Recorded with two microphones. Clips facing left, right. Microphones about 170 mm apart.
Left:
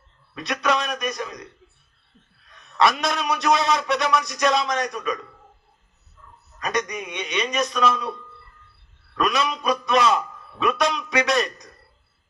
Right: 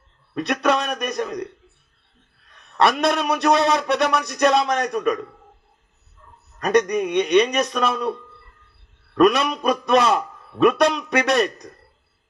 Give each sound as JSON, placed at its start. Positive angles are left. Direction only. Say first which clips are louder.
{"t": 0.3, "sound": "a man's voice", "louder": "right 4 dB", "side_deg": -55}
{"t": 2.7, "sound": "a man's voice", "louder": "right 3 dB", "side_deg": -60}
{"t": 6.6, "sound": "a man's voice", "louder": "right 9 dB", "side_deg": -60}
{"t": 9.2, "sound": "a man's voice", "louder": "right 6 dB", "side_deg": -55}